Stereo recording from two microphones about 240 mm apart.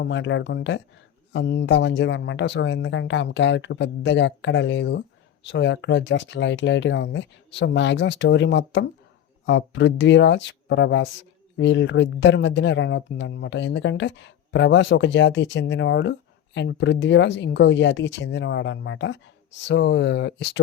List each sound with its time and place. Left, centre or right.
0.0 s speech: left